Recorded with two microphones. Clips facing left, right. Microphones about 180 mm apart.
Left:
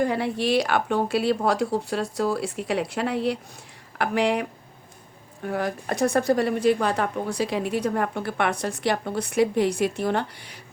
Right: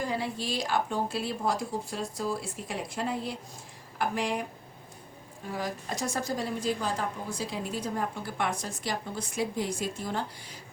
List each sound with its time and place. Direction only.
0.0 s a woman's voice: 60° left (ahead or behind)